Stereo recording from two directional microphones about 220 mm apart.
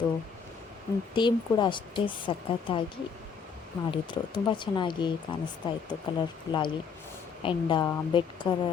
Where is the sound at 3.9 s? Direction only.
20° left (ahead or behind).